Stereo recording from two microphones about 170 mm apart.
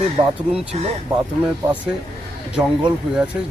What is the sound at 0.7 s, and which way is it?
Speech, 35° right (ahead or behind).